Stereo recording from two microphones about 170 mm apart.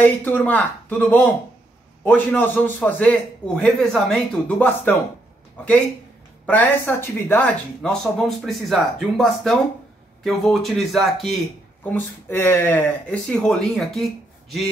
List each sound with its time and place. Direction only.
0.0 s speech: 10° left (ahead or behind)
6.4 s a man's voice: 10° left (ahead or behind)